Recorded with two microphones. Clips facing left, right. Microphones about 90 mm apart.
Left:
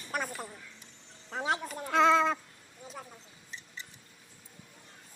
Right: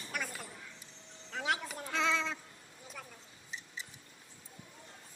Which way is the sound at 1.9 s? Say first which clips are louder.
Left 10 dB; 50° left (ahead or behind).